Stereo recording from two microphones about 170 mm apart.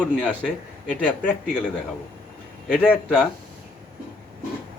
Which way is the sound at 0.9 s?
5° left (ahead or behind).